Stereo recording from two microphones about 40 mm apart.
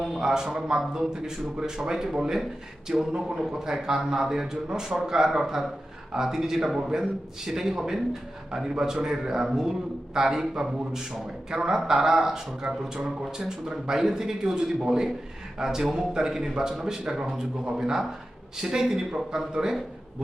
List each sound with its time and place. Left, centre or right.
0.0 s a man's voice: centre